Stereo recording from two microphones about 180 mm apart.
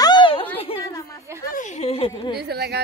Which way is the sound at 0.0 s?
25° left (ahead or behind).